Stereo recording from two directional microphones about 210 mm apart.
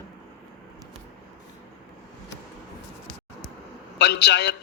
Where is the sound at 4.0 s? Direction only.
55° left (ahead or behind).